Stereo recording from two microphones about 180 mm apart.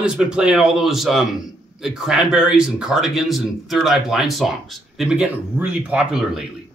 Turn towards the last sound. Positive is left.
turn(degrees=-5)  # may be behind; listen again after turning